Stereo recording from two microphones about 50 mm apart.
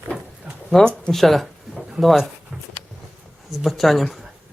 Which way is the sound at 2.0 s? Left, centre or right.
Centre.